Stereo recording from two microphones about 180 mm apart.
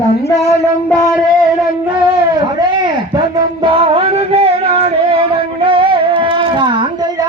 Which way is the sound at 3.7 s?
30° right (ahead or behind).